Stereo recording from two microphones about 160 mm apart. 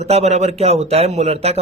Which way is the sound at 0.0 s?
45° right (ahead or behind).